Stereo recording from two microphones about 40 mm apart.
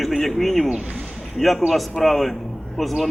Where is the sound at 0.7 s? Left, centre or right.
Right.